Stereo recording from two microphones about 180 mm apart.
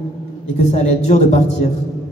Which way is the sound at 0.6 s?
40° left (ahead or behind).